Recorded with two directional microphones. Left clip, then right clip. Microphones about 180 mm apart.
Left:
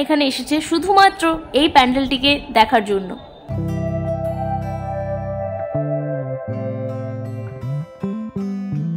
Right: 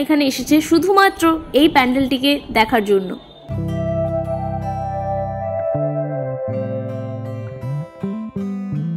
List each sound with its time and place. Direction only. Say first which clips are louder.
0.0 s a woman's voice: even; 5° right (ahead or behind)
3.5 s music: right 4 dB; 30° left (ahead or behind)
6.5 s music: right 2 dB; 30° left (ahead or behind)
8.4 s music: even; 25° left (ahead or behind)